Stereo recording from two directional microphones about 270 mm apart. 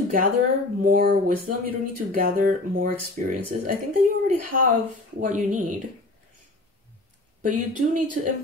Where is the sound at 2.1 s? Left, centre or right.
Right.